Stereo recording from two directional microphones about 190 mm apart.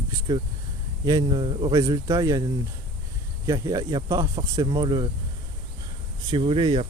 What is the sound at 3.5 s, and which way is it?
Speech, 20° right (ahead or behind).